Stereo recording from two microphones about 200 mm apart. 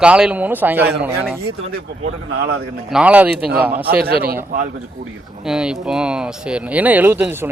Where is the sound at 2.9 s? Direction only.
5° right (ahead or behind).